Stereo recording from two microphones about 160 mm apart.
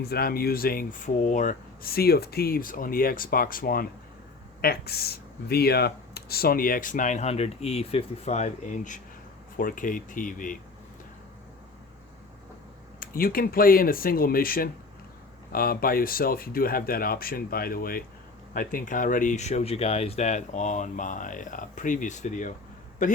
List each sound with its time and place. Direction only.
0.0 s speech: 75° left (ahead or behind)
4.6 s speech: 75° left (ahead or behind); by 10.6 s 55° left (ahead or behind)
13.0 s speech: 65° left (ahead or behind)